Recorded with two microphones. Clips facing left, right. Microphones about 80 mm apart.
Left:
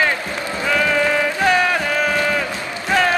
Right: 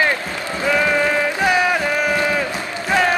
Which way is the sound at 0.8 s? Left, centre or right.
Centre.